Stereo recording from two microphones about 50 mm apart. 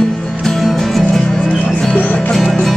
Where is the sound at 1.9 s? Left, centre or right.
Left.